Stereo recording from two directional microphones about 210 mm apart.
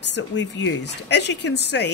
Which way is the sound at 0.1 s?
60° left (ahead or behind).